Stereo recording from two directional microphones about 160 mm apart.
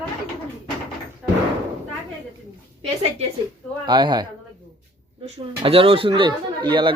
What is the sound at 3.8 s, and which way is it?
Speech, 30° right (ahead or behind).